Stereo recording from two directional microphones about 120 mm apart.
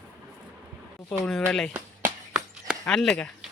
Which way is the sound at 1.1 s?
5° left (ahead or behind).